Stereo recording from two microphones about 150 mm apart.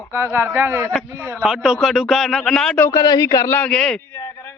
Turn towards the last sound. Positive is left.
turn(degrees=15)  # may be behind; listen again after turning